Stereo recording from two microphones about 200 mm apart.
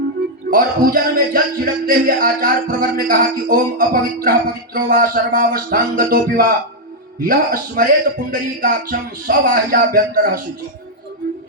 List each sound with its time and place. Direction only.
0.5 s speech: 45° right (ahead or behind)